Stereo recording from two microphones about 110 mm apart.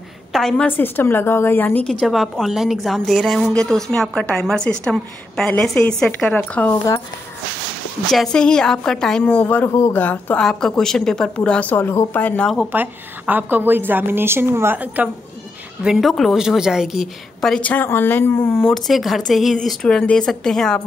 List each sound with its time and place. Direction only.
0.3 s a woman's voice: 5° left (ahead or behind)
0.7 s speech: 20° left (ahead or behind)
2.0 s a woman's voice: centre (ahead or behind)
8.1 s speech: 5° left (ahead or behind)
11.7 s speech: 20° left (ahead or behind)
12.7 s a woman's voice: 15° right (ahead or behind)
15.8 s a woman's voice: 5° right (ahead or behind); by 18.5 s 20° left (ahead or behind)
18.5 s a woman's voice: centre (ahead or behind)